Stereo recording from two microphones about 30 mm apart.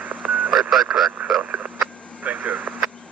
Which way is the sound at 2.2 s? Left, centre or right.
Right.